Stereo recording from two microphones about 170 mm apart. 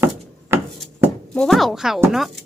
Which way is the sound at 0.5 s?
15° right (ahead or behind).